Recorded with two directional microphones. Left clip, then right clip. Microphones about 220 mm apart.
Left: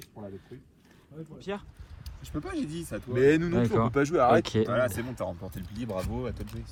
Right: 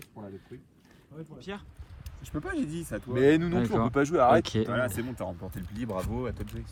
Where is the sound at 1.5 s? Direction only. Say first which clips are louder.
Left 6 dB; 5° right (ahead or behind).